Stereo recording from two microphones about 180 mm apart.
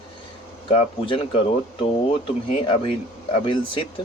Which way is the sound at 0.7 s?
30° left (ahead or behind).